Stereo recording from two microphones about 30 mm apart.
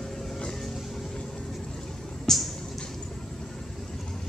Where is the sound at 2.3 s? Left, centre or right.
Centre.